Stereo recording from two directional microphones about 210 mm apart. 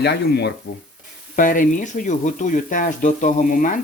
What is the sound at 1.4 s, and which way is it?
Speech, 40° left (ahead or behind).